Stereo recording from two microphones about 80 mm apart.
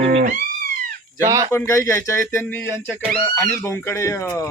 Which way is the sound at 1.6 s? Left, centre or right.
Left.